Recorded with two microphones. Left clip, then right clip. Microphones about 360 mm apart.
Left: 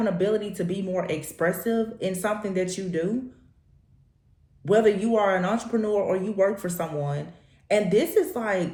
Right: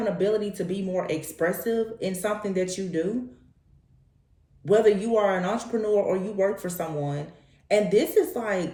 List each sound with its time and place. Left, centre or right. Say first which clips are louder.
0.0 s speech: even; left
4.6 s speech: even; left